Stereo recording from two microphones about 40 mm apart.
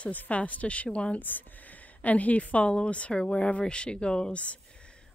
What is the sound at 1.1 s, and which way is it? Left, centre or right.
Speech, left.